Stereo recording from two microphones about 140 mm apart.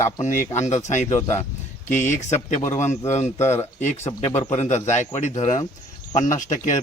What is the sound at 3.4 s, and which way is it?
Speech, 20° left (ahead or behind).